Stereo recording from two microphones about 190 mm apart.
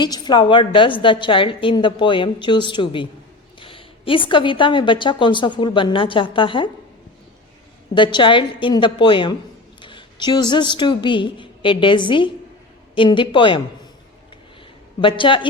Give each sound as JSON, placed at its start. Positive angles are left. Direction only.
{"t": 0.0, "sound": "a woman's voice", "side_deg": 25}
{"t": 7.9, "sound": "a woman's voice", "side_deg": 25}
{"t": 15.0, "sound": "a woman's voice", "side_deg": 25}